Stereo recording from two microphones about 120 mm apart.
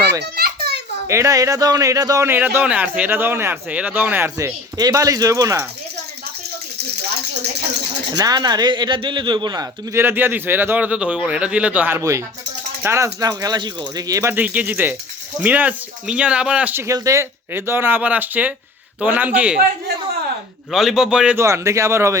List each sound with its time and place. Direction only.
1.0 s a man's voice: 25° right (ahead or behind)
4.4 s a man's voice: 30° right (ahead or behind)
8.1 s a man's voice: 35° right (ahead or behind)
9.9 s a man's voice: 15° right (ahead or behind)
14.3 s speech: 15° right (ahead or behind)
16.8 s speech: 25° right (ahead or behind)
20.7 s a man's voice: centre (ahead or behind)
21.3 s a man's voice: 25° right (ahead or behind)